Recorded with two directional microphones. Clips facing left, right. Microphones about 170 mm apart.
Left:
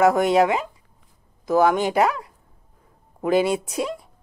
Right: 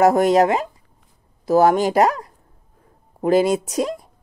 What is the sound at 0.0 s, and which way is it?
Speech, 35° right (ahead or behind).